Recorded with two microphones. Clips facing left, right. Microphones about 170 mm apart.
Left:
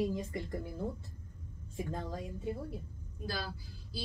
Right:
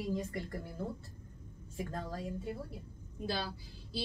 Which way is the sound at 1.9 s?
15° left (ahead or behind).